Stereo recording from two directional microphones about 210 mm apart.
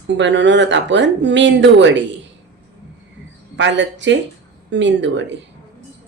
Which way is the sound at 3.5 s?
60° right (ahead or behind).